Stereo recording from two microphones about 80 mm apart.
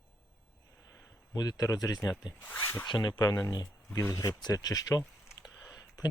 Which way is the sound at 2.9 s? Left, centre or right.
Left.